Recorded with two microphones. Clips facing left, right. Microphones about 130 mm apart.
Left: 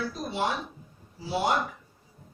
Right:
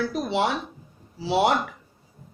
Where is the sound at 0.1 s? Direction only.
85° right.